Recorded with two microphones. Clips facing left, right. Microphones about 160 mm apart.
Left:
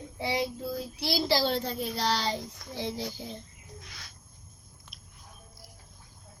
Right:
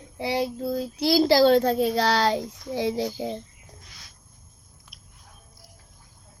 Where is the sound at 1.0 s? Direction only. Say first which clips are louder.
Right 9 dB; 45° right (ahead or behind).